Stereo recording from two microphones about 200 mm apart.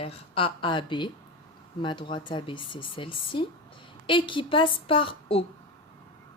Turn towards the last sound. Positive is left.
turn(degrees=25)  # may be behind; listen again after turning